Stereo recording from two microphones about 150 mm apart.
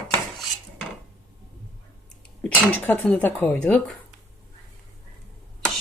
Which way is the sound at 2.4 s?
10° left (ahead or behind).